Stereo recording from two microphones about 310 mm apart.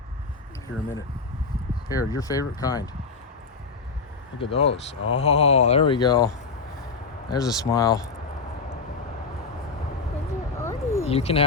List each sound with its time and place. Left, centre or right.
1.9 s speech: centre
4.4 s speech: centre
7.3 s speech: centre
10.6 s a sound: centre
11.0 s speech: centre